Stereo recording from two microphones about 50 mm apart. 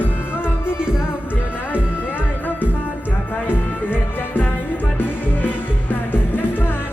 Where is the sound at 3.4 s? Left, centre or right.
Left.